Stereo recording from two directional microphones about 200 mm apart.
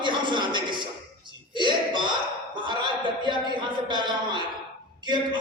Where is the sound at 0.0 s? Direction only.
25° right (ahead or behind).